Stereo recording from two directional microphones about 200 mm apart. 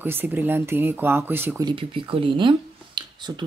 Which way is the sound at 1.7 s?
25° right (ahead or behind).